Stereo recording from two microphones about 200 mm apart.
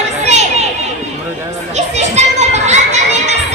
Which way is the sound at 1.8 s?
35° right (ahead or behind).